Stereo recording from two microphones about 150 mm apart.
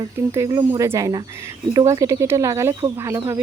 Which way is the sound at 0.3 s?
20° right (ahead or behind).